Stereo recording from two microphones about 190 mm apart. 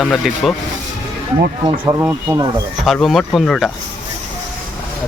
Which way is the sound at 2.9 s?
Centre (ahead or behind).